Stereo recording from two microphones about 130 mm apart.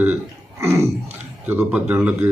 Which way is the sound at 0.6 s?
20° right (ahead or behind).